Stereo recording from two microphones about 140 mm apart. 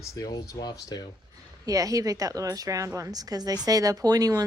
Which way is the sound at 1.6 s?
25° right (ahead or behind).